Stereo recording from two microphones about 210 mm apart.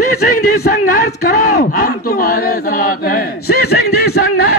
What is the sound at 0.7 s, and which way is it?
Speech, 45° left (ahead or behind).